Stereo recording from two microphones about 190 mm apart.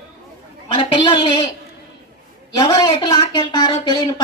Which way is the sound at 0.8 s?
25° left (ahead or behind).